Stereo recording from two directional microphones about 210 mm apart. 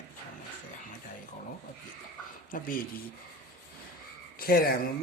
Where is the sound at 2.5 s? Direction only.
40° left (ahead or behind).